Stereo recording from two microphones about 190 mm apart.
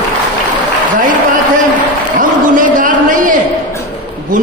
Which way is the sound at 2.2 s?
45° right (ahead or behind).